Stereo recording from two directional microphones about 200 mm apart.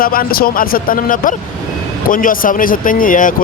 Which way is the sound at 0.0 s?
45° left (ahead or behind).